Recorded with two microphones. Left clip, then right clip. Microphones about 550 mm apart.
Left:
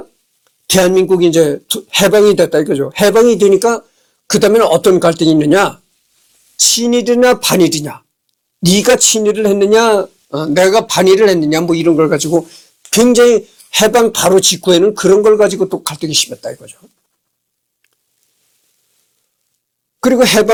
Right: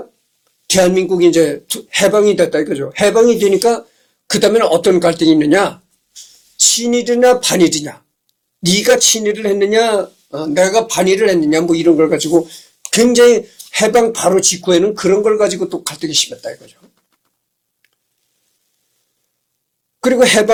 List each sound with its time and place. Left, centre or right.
0.7 s a man's voice: left
20.0 s speech: left